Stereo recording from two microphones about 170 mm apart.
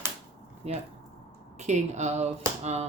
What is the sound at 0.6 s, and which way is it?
Speech, 35° right (ahead or behind).